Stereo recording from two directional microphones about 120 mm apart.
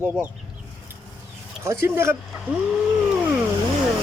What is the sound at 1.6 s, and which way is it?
Speech, 20° right (ahead or behind).